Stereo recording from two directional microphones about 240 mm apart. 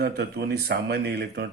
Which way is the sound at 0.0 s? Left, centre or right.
Right.